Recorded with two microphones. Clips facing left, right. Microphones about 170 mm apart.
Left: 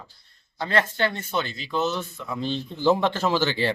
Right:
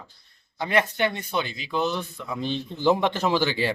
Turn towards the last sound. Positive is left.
turn(degrees=-10)  # may be behind; listen again after turning